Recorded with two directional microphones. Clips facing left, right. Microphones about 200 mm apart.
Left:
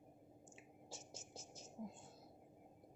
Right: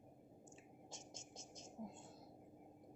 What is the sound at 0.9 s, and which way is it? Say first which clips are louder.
Whispering: left 3 dB; 5° left (ahead or behind).